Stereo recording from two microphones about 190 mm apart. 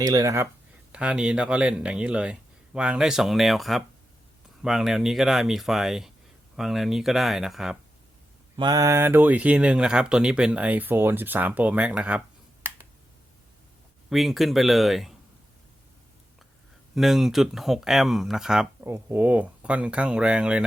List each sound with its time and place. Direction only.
0.0 s speech: 20° right (ahead or behind)
0.9 s speech: 5° right (ahead or behind)
8.5 s speech: 20° right (ahead or behind); by 12.2 s 5° right (ahead or behind)
14.1 s speech: centre (ahead or behind)
16.9 s speech: centre (ahead or behind)